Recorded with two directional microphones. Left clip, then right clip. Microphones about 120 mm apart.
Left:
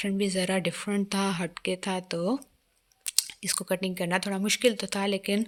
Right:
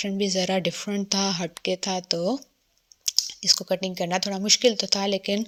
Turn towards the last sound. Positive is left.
turn(degrees=-20)  # may be behind; listen again after turning